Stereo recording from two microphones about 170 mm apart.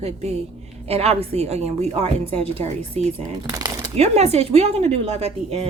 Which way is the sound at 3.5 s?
20° right (ahead or behind).